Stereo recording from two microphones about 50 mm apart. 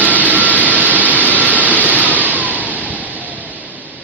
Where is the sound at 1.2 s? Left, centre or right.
Right.